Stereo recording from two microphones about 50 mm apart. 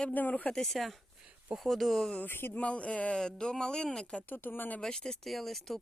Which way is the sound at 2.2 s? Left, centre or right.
Left.